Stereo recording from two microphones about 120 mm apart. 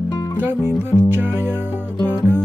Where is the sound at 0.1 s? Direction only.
30° left (ahead or behind).